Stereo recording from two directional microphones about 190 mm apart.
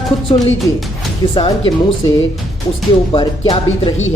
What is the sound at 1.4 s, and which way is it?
Speech, 25° left (ahead or behind).